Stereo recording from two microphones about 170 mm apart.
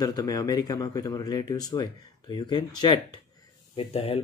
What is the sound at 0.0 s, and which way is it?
Speech, 25° left (ahead or behind).